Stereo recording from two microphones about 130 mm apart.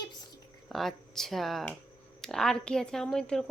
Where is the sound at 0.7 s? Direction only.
Centre (ahead or behind).